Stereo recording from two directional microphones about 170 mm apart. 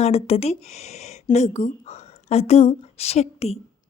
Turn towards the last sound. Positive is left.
turn(degrees=35)  # may be behind; listen again after turning